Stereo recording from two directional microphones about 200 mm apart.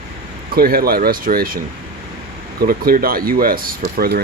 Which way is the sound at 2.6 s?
45° right (ahead or behind).